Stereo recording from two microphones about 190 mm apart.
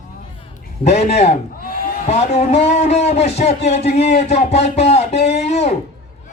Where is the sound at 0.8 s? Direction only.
35° left (ahead or behind).